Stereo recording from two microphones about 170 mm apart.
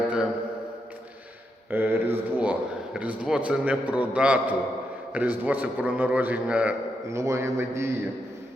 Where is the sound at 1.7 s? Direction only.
10° right (ahead or behind).